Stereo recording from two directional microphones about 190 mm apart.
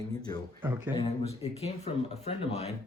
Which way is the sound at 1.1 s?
30° left (ahead or behind).